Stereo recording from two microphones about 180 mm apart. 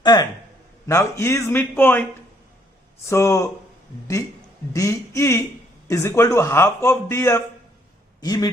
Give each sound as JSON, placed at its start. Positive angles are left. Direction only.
{"t": 0.0, "sound": "a man's voice", "side_deg": 25}
{"t": 3.1, "sound": "a man's voice", "side_deg": 15}
{"t": 4.7, "sound": "a man's voice", "side_deg": 15}